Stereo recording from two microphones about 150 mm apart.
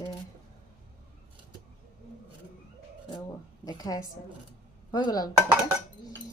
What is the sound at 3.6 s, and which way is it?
A woman's voice, 25° left (ahead or behind).